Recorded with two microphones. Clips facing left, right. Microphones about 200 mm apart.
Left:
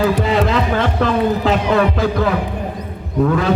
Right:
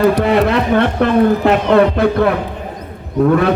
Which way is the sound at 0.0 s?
65° right (ahead or behind).